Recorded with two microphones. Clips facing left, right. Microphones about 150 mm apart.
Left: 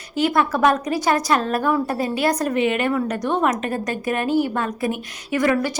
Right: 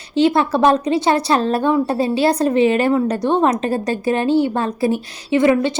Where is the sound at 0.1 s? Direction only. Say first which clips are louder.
Right 5 dB; 30° right (ahead or behind).